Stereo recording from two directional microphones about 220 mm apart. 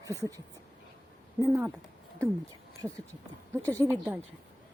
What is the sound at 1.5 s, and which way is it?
Speech, 10° right (ahead or behind).